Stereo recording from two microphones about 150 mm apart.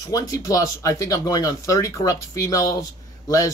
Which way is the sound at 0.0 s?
25° left (ahead or behind).